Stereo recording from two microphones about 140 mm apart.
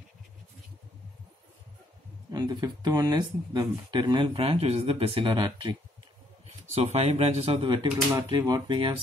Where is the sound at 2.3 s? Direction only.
30° right (ahead or behind).